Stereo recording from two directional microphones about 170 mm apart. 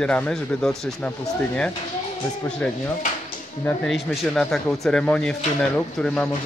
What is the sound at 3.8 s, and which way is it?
Speech, centre (ahead or behind).